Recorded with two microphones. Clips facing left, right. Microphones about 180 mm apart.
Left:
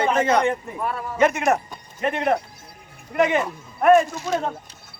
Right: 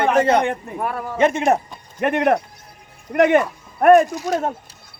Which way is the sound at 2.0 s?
60° right (ahead or behind).